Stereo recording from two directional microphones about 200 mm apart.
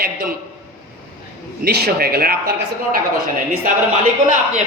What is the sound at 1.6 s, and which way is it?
Speech, 50° right (ahead or behind).